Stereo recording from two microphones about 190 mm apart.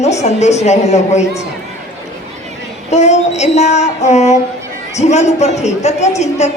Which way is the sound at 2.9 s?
35° left (ahead or behind).